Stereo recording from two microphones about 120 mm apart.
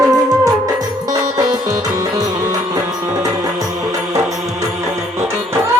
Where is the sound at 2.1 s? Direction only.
30° right (ahead or behind).